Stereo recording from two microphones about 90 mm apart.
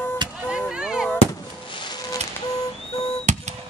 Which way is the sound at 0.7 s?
10° right (ahead or behind).